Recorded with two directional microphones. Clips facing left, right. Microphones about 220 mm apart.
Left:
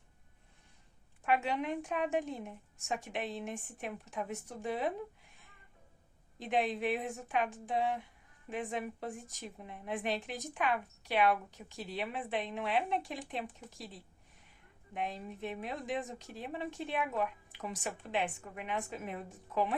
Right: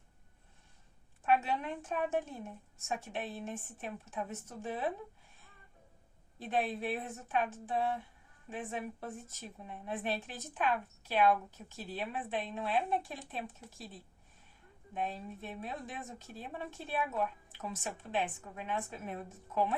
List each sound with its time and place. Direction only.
1.3 s speech: 15° left (ahead or behind)
6.4 s speech: 15° left (ahead or behind)
15.0 s speech: 15° left (ahead or behind)